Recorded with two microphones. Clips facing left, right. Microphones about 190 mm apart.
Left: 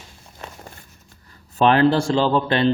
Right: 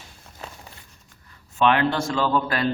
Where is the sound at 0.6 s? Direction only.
40° left (ahead or behind).